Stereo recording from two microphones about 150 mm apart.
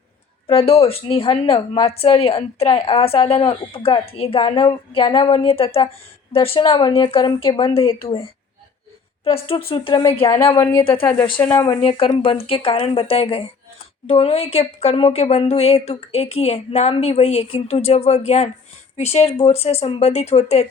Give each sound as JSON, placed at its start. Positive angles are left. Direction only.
{"t": 0.4, "sound": "a woman's voice", "side_deg": 40}
{"t": 9.2, "sound": "a woman's voice", "side_deg": 40}
{"t": 11.8, "sound": "a woman's voice", "side_deg": 40}